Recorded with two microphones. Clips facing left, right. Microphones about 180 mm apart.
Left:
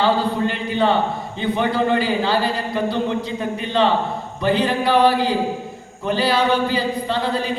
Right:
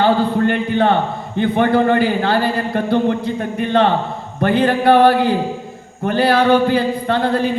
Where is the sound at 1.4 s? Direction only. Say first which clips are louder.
Right 6 dB; 55° right (ahead or behind).